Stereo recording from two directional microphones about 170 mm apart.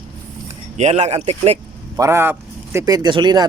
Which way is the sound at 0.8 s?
40° right (ahead or behind).